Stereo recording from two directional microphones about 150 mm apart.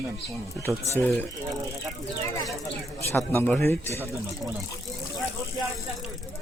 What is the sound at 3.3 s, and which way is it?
Speech, 10° left (ahead or behind).